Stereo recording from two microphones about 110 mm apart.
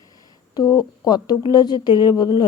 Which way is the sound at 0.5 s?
35° left (ahead or behind).